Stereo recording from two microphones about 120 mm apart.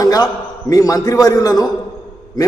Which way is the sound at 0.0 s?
30° left (ahead or behind).